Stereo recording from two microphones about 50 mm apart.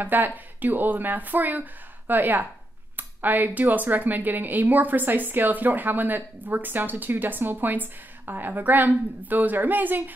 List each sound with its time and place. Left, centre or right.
0.0 s speech: right